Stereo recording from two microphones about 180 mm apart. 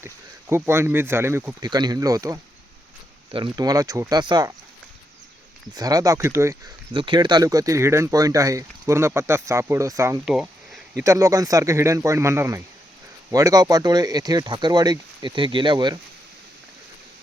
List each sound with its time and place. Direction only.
0.0 s speech: 15° right (ahead or behind)
5.7 s speech: 20° right (ahead or behind)
6.9 s speech: 25° right (ahead or behind)
10.2 s a sound: centre (ahead or behind)
10.9 s speech: 15° right (ahead or behind)